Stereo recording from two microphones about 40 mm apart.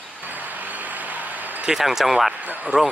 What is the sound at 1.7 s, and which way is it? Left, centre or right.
Speech, centre.